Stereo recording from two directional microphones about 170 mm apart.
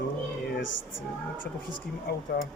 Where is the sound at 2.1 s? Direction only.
70° left (ahead or behind).